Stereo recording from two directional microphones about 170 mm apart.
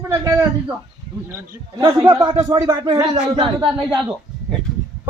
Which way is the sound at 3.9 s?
5° right (ahead or behind).